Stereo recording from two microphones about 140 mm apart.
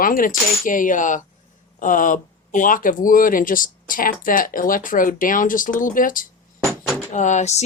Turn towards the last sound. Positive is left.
turn(degrees=55)  # may be behind; listen again after turning